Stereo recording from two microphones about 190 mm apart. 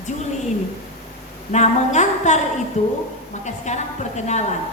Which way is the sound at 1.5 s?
40° left (ahead or behind).